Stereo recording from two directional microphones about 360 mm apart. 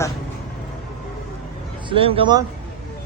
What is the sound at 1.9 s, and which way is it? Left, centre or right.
Speech, centre.